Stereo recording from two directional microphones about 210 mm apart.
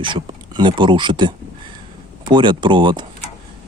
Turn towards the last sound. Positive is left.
turn(degrees=-20)  # may be behind; listen again after turning